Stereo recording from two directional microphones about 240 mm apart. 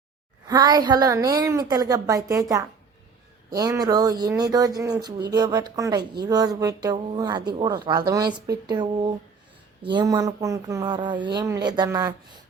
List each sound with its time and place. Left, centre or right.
0.4 s a woman's voice: centre